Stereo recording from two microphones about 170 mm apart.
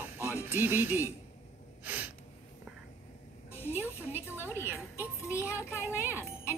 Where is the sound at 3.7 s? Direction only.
10° right (ahead or behind).